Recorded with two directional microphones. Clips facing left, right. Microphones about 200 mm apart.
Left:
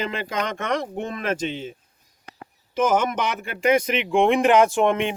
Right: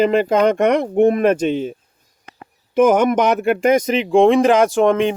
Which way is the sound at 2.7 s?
60° right (ahead or behind).